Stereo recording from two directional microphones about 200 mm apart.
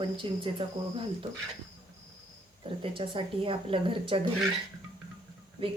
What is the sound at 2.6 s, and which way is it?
Speech, 25° right (ahead or behind).